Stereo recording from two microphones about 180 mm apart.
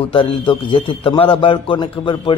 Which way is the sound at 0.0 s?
30° left (ahead or behind).